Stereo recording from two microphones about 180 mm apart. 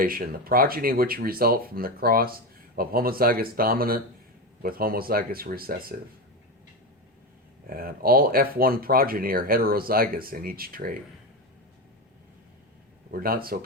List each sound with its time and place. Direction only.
0.0 s speech: 55° right (ahead or behind)
7.7 s speech: 55° right (ahead or behind)
13.1 s speech: 55° right (ahead or behind)